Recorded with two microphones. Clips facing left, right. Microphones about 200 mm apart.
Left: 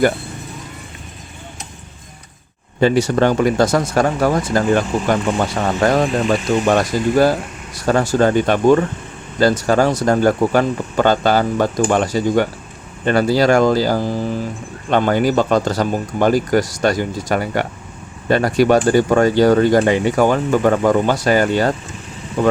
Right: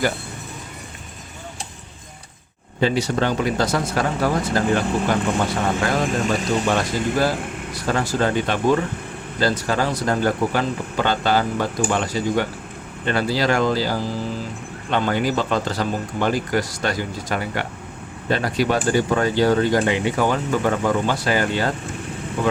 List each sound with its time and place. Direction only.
2.8 s speech: 50° left (ahead or behind)
5.8 s speech: 45° left (ahead or behind)